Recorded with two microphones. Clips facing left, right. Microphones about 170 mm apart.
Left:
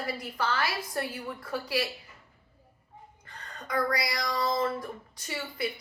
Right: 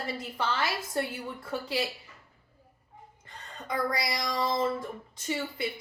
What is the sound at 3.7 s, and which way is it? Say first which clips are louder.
A woman's voice: left 1 dB; 25° right (ahead or behind).